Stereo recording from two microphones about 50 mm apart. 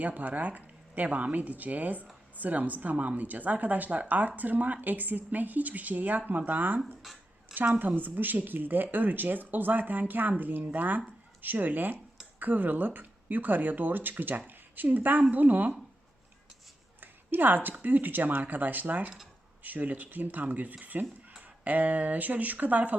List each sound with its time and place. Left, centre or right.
0.0 s speech: right
17.0 s speech: right